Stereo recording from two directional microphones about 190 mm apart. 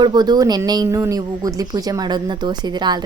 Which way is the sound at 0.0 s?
20° right (ahead or behind).